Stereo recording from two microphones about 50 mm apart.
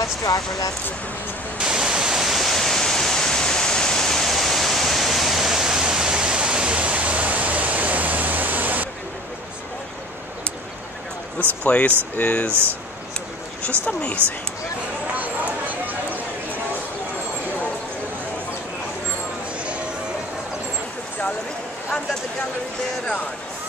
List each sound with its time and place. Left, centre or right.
1.6 s pink noise: centre; by 8.8 s right
11.3 s speech: left
13.8 s speech: left
15.1 s a sound: right